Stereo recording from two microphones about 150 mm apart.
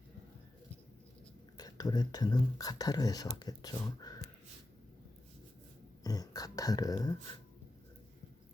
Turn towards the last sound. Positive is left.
turn(degrees=25)  # may be behind; listen again after turning